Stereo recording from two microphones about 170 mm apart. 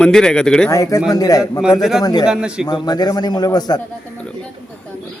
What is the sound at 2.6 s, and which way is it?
Speech, 25° left (ahead or behind).